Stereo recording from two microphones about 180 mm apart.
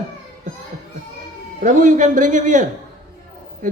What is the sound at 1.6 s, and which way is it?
A man's voice, 45° right (ahead or behind).